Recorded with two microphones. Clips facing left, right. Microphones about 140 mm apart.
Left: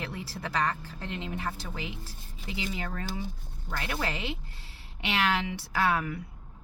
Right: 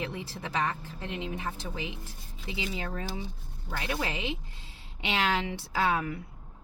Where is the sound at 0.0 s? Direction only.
20° right (ahead or behind).